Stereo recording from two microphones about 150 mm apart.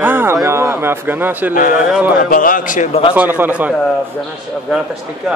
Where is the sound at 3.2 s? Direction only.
10° right (ahead or behind).